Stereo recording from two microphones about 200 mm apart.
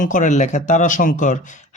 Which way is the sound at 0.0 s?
40° left (ahead or behind).